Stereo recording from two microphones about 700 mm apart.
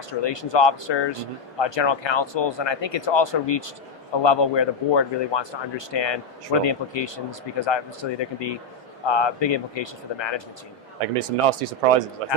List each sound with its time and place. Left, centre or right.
0.1 s speech: left
11.0 s speech: right